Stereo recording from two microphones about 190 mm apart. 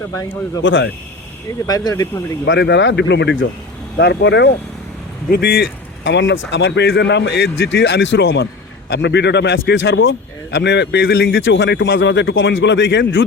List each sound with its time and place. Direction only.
0.1 s speech: 20° left (ahead or behind)
0.6 s speech: 80° left
1.6 s speech: 20° left (ahead or behind)
2.5 s a man's voice: 70° left (ahead or behind)